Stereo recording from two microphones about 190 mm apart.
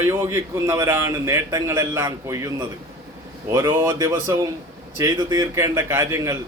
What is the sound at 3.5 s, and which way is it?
A man's voice, 15° right (ahead or behind).